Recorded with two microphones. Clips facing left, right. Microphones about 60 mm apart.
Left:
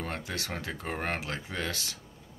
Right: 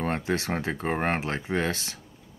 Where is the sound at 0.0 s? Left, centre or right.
Right.